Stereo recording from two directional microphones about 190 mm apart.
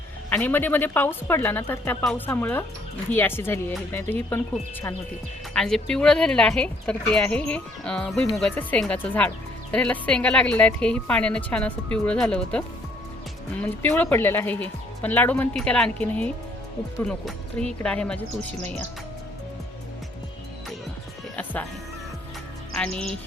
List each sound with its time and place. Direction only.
0.3 s speech: 10° left (ahead or behind)
5.5 s a woman's voice: 5° left (ahead or behind)
21.3 s music: 10° left (ahead or behind)
22.7 s music: 5° left (ahead or behind)